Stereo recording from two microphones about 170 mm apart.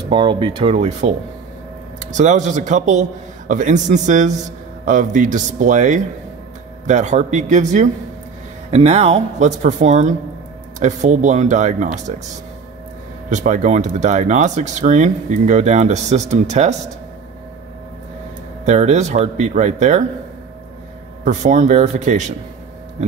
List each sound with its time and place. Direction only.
0.1 s speech: 30° right (ahead or behind)
2.1 s speech: 45° right (ahead or behind)
13.3 s speech: 45° right (ahead or behind)
18.7 s speech: 40° right (ahead or behind)
21.2 s speech: 45° right (ahead or behind)